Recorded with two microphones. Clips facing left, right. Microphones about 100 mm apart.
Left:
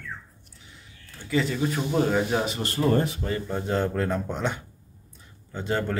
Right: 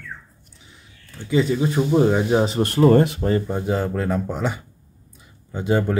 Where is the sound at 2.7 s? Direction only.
80° right.